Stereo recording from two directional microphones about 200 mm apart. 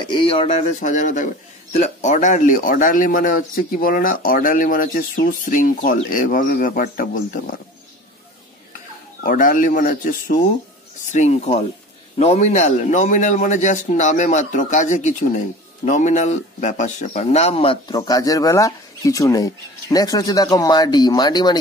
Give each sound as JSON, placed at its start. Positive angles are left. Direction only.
{"t": 0.0, "sound": "a man's voice", "side_deg": 25}
{"t": 9.2, "sound": "a man's voice", "side_deg": 45}